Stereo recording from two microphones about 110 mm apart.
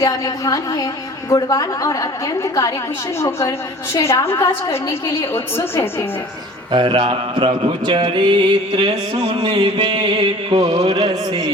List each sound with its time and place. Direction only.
0.0 s a woman's voice: 30° left (ahead or behind)
6.7 s mantra: 50° right (ahead or behind); by 10.9 s 65° right (ahead or behind)
10.9 s a sound: 35° right (ahead or behind)